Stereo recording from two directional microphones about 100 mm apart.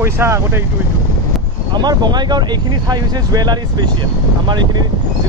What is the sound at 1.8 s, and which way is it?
Speech, 45° right (ahead or behind).